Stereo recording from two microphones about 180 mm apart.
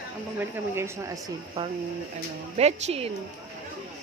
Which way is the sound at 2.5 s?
35° right (ahead or behind).